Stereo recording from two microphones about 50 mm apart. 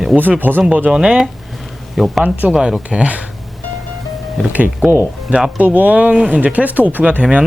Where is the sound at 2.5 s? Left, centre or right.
Centre.